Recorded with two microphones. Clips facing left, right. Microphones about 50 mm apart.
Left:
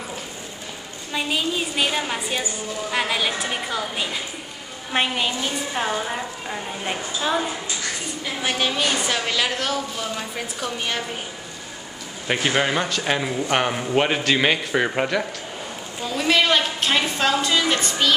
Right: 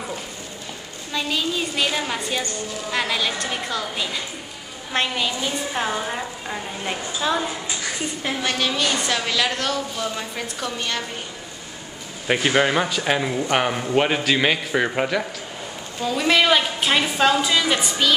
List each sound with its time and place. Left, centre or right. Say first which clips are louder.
1.1 s a woman's voice: even; centre
5.7 s a woman's voice: left 1 dB; centre
12.3 s a woman's voice: right 2 dB; centre